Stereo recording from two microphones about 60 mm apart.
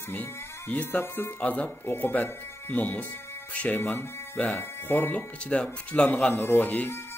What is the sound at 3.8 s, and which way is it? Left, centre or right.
Speech, left.